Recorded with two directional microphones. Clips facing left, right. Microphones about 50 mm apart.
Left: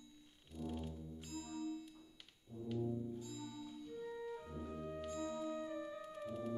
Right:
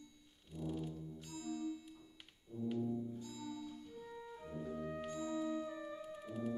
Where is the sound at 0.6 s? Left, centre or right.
Centre.